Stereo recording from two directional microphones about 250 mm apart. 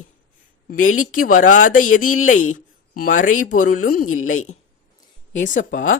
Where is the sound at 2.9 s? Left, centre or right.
Left.